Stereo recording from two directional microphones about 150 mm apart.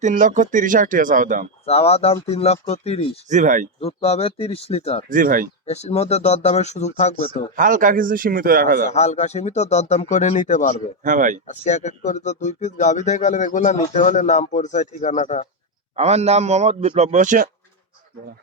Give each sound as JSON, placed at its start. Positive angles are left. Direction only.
{"t": 0.0, "sound": "speech", "side_deg": -60}
{"t": 1.6, "sound": "speech", "side_deg": 45}
{"t": 3.2, "sound": "speech", "side_deg": -55}
{"t": 3.8, "sound": "speech", "side_deg": 40}
{"t": 5.0, "sound": "speech", "side_deg": -65}
{"t": 5.6, "sound": "speech", "side_deg": 45}
{"t": 7.5, "sound": "a man's voice", "side_deg": -60}
{"t": 8.9, "sound": "speech", "side_deg": 45}
{"t": 11.0, "sound": "speech", "side_deg": -60}
{"t": 11.4, "sound": "speech", "side_deg": 55}
{"t": 16.0, "sound": "a man's voice", "side_deg": -45}